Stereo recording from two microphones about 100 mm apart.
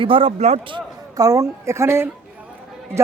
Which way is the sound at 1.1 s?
35° right (ahead or behind).